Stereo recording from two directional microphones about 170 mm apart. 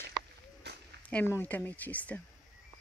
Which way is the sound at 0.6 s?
75° right (ahead or behind).